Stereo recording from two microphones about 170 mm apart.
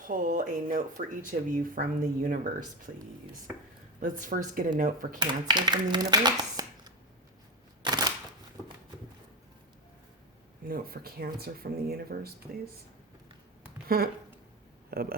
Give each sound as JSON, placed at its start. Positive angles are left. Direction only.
{"t": 0.0, "sound": "speech", "side_deg": -50}
{"t": 4.0, "sound": "speech", "side_deg": -50}
{"t": 5.2, "sound": "speech", "side_deg": -25}
{"t": 7.9, "sound": "a sound", "side_deg": -25}
{"t": 10.7, "sound": "speech", "side_deg": -60}
{"t": 13.8, "sound": "speech", "side_deg": -60}